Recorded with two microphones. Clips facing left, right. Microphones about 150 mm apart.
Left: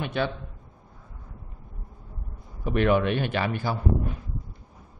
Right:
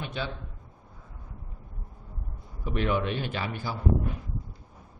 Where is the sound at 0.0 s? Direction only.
65° left (ahead or behind).